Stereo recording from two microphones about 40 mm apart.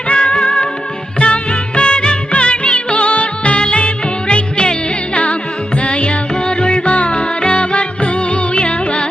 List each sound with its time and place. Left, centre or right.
0.1 s music: left
1.2 s music of bollywood: left
5.2 s music: left